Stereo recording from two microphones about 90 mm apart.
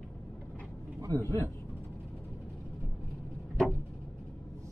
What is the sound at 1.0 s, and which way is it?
Speech, 40° right (ahead or behind).